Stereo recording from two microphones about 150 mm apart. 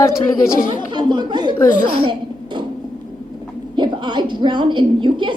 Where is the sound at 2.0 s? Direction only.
35° right (ahead or behind).